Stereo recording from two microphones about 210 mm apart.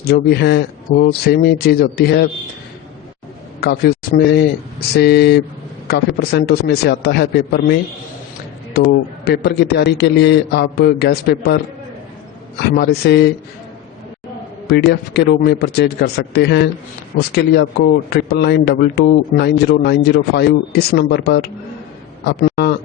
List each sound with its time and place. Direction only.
0.0 s speech: 50° left (ahead or behind)
3.6 s speech: 45° left (ahead or behind)
9.2 s speech: 50° left (ahead or behind)
12.7 s speech: 50° left (ahead or behind)
14.7 s speech: 50° left (ahead or behind)
22.4 s a sound: 50° left (ahead or behind)